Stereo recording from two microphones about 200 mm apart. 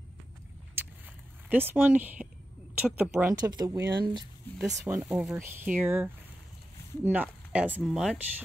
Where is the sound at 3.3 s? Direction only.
20° right (ahead or behind).